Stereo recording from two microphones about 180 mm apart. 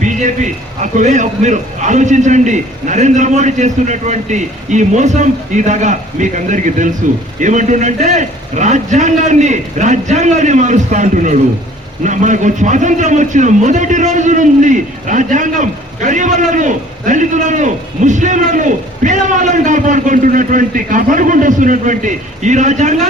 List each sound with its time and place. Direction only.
0.0 s a man's voice: 45° right (ahead or behind)